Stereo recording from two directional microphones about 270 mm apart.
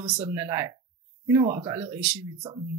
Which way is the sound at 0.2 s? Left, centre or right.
Centre.